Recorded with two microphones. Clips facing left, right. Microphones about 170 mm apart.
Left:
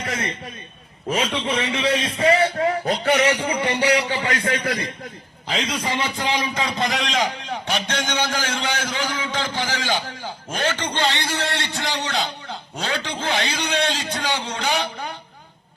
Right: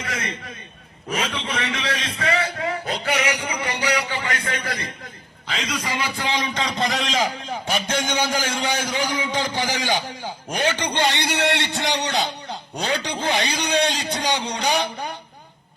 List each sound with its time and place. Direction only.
0.0 s a sound: 30° left (ahead or behind)
1.1 s a man's voice: 30° left (ahead or behind)
5.8 s a man's voice: 20° left (ahead or behind); by 14.7 s 15° right (ahead or behind)